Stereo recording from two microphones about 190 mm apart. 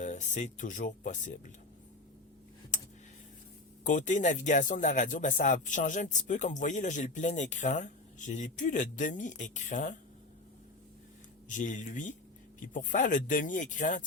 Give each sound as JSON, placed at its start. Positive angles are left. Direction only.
{"t": 0.0, "sound": "speech", "side_deg": 40}
{"t": 2.7, "sound": "a sound", "side_deg": 40}
{"t": 3.8, "sound": "speech", "side_deg": 40}
{"t": 11.4, "sound": "speech", "side_deg": 40}